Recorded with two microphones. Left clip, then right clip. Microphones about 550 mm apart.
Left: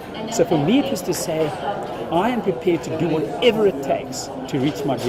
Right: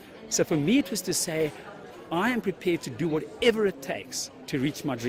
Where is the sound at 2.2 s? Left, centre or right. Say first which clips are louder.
Left 4 dB; right.